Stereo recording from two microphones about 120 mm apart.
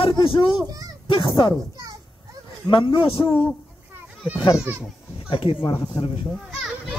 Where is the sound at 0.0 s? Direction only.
45° left (ahead or behind).